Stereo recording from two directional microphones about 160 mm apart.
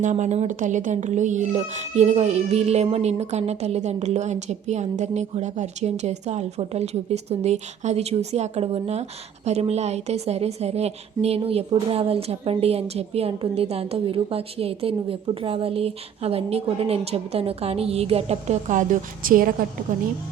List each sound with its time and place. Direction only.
0.0 s a woman's voice: 50° right (ahead or behind)